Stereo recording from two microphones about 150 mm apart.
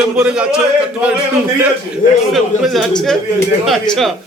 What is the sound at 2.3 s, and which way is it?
A man's voice, centre (ahead or behind).